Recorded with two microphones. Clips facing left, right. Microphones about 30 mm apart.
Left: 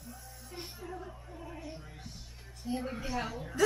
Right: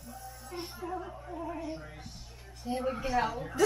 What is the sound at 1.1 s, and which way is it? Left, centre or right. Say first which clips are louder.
A woman's voice: right 8 dB; centre.